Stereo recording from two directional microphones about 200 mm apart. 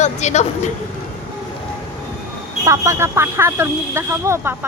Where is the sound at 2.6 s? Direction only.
15° right (ahead or behind).